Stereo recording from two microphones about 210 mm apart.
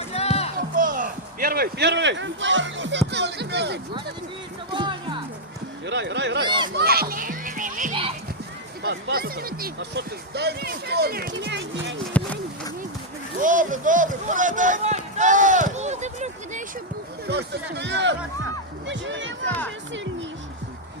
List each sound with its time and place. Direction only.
0.1 s a sound: 30° left (ahead or behind)
0.8 s a sound: 40° right (ahead or behind)
4.7 s music: 25° right (ahead or behind)
5.8 s speech: 55° right (ahead or behind)
6.4 s speech: 20° right (ahead or behind)
6.7 s music: 45° right (ahead or behind)
8.8 s speech: 50° right (ahead or behind)
12.1 s a sound: 5° left (ahead or behind)
13.4 s speech: 40° right (ahead or behind)
17.2 s speech: 55° right (ahead or behind)